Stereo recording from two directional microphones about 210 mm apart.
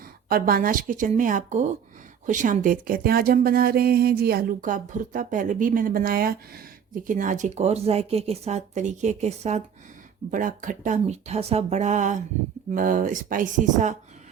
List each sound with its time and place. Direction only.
0.3 s speech: 45° right (ahead or behind)